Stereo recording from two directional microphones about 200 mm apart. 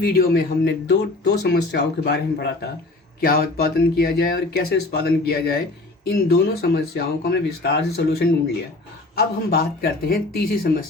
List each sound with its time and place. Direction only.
0.0 s speech: 50° left (ahead or behind)